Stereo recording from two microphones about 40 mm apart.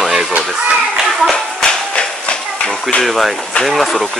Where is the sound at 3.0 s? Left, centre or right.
Centre.